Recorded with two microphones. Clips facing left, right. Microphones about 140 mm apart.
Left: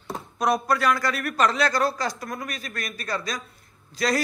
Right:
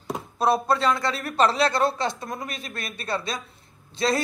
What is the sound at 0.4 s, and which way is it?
A man's voice, 25° right (ahead or behind).